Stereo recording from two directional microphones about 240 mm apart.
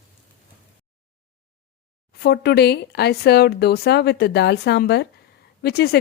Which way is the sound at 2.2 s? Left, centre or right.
Left.